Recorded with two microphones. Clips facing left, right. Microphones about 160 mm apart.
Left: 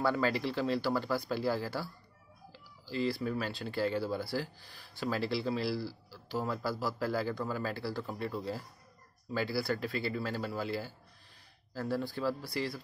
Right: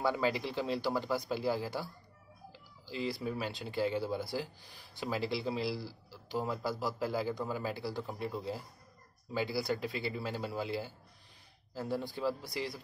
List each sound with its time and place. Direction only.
0.0 s speech: 15° right (ahead or behind)